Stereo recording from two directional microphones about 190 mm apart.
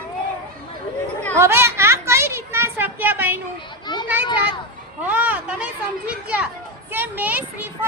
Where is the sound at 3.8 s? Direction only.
25° left (ahead or behind).